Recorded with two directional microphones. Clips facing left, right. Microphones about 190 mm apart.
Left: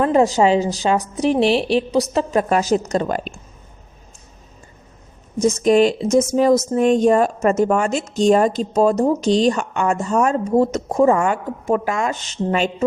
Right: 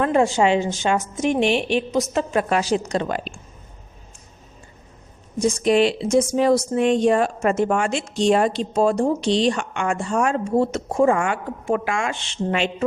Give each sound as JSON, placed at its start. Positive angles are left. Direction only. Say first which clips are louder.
{"t": 0.0, "sound": "a woman's voice", "louder": "left 3 dB", "side_deg": 35}
{"t": 5.4, "sound": "speech", "louder": "left 3 dB", "side_deg": 20}
{"t": 5.6, "sound": "a woman's voice", "louder": "left 3 dB", "side_deg": 45}